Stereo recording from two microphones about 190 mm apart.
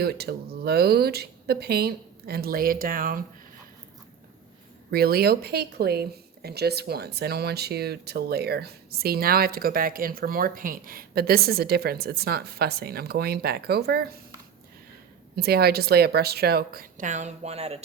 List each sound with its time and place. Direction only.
0.0 s speech: 55° right (ahead or behind)
4.9 s speech: 55° right (ahead or behind)
15.4 s speech: 55° right (ahead or behind); by 17.8 s 35° right (ahead or behind)